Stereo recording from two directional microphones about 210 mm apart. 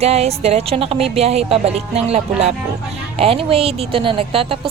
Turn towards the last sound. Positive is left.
turn(degrees=-25)  # may be behind; listen again after turning